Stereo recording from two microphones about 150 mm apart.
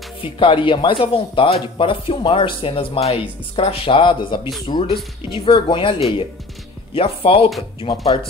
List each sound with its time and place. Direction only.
0.2 s speech: 35° left (ahead or behind)
7.0 s speech: 40° left (ahead or behind)